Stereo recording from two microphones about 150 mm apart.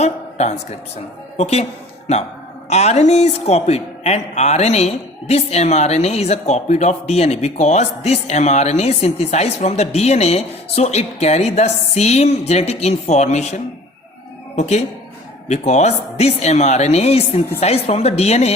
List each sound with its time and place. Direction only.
0.0 s a sound: 50° left (ahead or behind)
1.4 s a man's voice: 45° left (ahead or behind)
2.6 s a man's voice: 45° left (ahead or behind)